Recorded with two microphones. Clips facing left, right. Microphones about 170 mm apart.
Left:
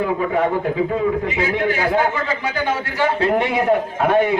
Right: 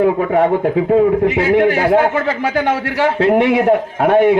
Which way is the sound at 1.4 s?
60° right (ahead or behind).